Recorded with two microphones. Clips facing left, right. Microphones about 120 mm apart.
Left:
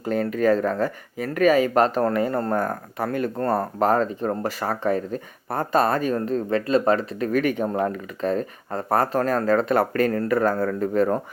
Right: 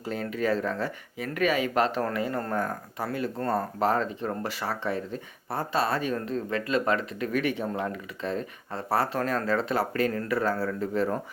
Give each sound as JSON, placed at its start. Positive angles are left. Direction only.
{"t": 0.0, "sound": "speech", "side_deg": 50}